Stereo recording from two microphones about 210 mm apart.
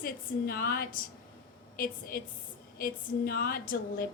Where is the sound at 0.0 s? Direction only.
45° left (ahead or behind).